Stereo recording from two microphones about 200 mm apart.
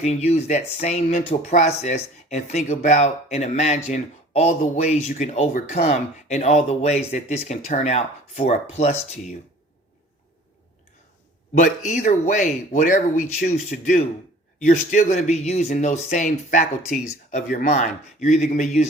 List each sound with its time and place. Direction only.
0.0 s speech: 35° left (ahead or behind)
11.5 s speech: 40° left (ahead or behind)